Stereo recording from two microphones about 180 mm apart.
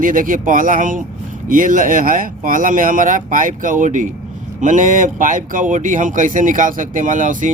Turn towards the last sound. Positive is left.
turn(degrees=-45)  # may be behind; listen again after turning